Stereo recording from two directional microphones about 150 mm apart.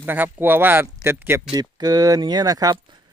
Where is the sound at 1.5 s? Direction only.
25° right (ahead or behind).